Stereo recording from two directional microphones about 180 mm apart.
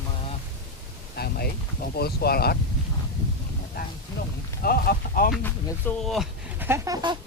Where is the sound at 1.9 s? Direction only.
60° left (ahead or behind).